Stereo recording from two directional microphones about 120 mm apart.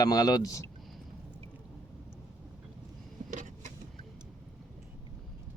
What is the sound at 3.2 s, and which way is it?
Vehicle, 90° right.